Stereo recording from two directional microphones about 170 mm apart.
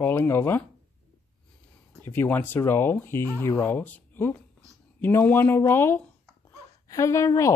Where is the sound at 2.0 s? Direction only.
15° left (ahead or behind).